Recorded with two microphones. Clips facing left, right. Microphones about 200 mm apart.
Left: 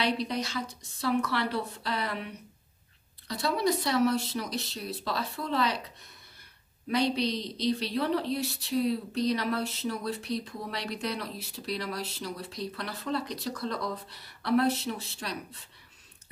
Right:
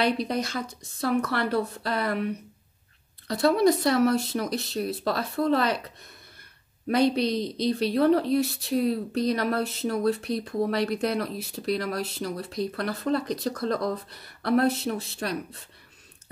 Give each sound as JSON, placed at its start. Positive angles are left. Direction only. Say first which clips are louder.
{"t": 0.0, "sound": "a woman's voice", "louder": "right 4 dB", "side_deg": -50}
{"t": 3.3, "sound": "a woman's voice", "louder": "right 7 dB", "side_deg": -55}
{"t": 6.9, "sound": "a woman's voice", "louder": "right 5 dB", "side_deg": -50}